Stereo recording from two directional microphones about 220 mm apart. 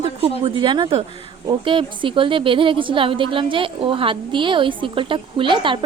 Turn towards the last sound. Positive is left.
turn(degrees=-20)  # may be behind; listen again after turning